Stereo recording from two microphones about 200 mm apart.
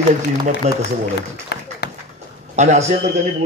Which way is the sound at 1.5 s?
55° left (ahead or behind).